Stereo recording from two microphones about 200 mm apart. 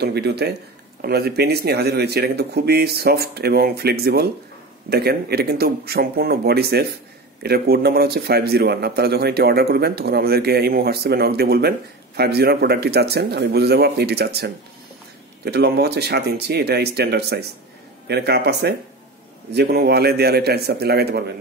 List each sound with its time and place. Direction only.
0.0 s a man's voice: 55° right (ahead or behind)